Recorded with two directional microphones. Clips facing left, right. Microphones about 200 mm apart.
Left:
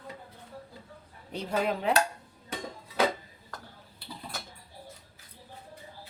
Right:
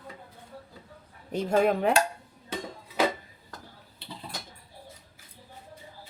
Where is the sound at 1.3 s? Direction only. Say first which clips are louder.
Right 6 dB; 45° right (ahead or behind).